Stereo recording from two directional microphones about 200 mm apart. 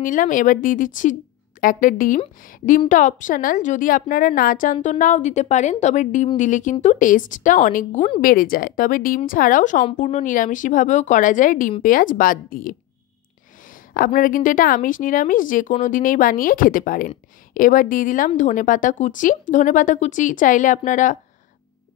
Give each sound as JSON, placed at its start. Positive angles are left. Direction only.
{"t": 0.0, "sound": "a woman's voice", "side_deg": 40}